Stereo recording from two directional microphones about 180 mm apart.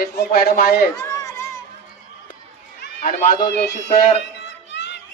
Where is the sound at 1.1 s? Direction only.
15° left (ahead or behind).